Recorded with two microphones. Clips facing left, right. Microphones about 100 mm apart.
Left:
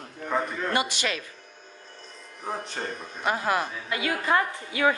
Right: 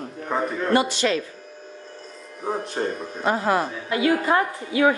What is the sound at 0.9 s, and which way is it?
Speech, 10° left (ahead or behind).